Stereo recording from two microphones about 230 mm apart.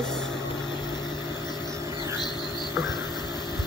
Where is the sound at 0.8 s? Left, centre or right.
Centre.